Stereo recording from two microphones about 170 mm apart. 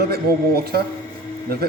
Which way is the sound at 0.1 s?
70° right (ahead or behind).